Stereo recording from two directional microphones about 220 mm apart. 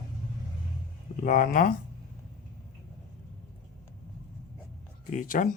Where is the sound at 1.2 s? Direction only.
40° left (ahead or behind).